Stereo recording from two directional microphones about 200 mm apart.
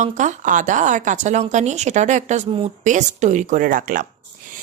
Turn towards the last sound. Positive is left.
turn(degrees=-45)  # may be behind; listen again after turning